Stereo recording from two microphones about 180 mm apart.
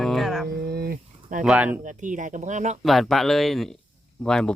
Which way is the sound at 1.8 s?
45° right (ahead or behind).